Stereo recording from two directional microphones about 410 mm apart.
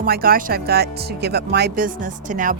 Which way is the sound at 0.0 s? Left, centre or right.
Right.